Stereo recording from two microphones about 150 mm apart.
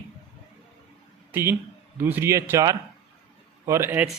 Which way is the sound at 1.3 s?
15° right (ahead or behind).